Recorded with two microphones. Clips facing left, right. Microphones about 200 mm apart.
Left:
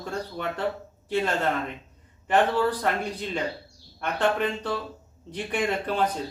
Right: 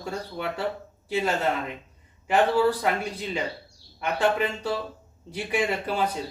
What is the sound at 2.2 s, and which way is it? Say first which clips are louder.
Speech: right 1 dB; 10° right (ahead or behind).